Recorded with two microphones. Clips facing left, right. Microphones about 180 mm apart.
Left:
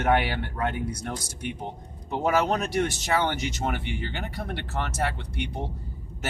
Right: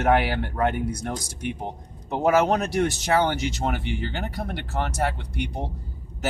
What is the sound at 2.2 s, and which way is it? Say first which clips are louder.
Speech: right 4 dB; 40° right (ahead or behind).